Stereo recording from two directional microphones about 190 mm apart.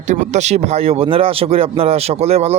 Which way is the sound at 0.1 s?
35° right (ahead or behind).